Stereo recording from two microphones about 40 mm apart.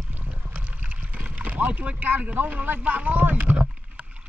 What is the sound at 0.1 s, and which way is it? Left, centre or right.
Boat, right.